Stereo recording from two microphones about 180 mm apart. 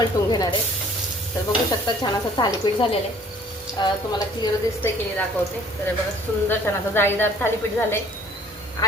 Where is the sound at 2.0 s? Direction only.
25° left (ahead or behind).